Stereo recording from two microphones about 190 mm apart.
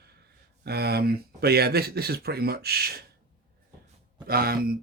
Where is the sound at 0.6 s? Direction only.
55° right (ahead or behind).